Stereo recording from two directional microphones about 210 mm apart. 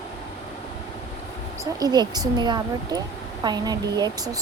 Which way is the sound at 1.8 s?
20° right (ahead or behind).